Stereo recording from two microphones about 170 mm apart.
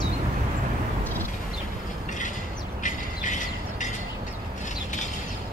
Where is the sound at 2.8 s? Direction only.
45° left (ahead or behind).